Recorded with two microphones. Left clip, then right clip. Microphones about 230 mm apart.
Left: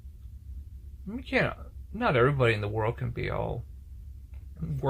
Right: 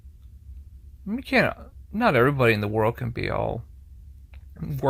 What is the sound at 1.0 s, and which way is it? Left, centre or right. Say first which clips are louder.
Speech: right 6 dB; right.